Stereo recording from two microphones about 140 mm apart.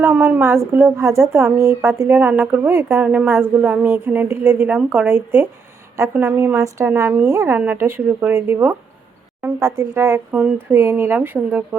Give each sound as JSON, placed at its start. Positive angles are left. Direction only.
{"t": 0.0, "sound": "speech", "side_deg": -15}